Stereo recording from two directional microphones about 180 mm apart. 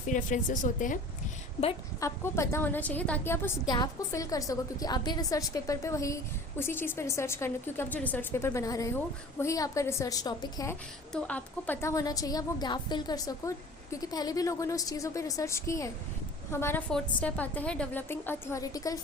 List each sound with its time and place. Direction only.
0.1 s a woman's voice: 45° left (ahead or behind)
2.0 s a woman's voice: 15° left (ahead or behind)
11.1 s a woman's voice: 5° left (ahead or behind)